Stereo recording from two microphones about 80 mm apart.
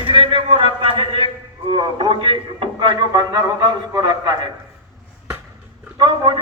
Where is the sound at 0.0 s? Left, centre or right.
Right.